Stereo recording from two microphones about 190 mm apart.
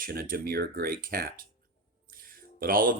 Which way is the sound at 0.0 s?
50° right (ahead or behind).